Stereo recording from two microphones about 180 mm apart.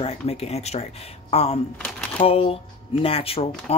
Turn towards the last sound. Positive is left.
turn(degrees=35)  # may be behind; listen again after turning